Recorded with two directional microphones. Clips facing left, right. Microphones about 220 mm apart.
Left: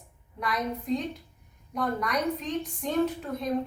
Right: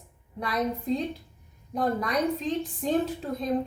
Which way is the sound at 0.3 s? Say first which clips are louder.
Right 2 dB; 30° right (ahead or behind).